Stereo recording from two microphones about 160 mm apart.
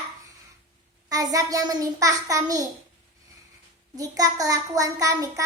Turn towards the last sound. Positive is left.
turn(degrees=-20)  # may be behind; listen again after turning